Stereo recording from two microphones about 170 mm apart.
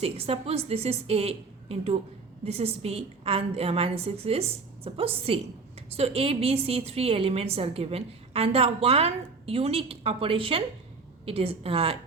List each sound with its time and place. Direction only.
0.0 s a woman's voice: 35° right (ahead or behind)